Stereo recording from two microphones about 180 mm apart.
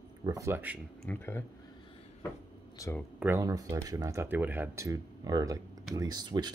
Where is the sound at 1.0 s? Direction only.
10° left (ahead or behind).